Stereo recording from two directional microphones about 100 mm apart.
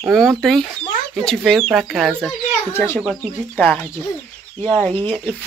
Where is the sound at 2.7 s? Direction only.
25° left (ahead or behind).